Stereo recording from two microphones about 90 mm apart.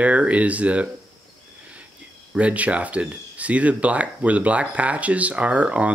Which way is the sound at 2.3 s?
15° right (ahead or behind).